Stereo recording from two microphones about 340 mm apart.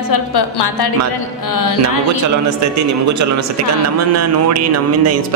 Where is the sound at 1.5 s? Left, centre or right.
Left.